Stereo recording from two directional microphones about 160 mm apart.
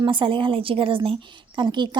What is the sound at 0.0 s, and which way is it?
A woman's voice, 30° right (ahead or behind).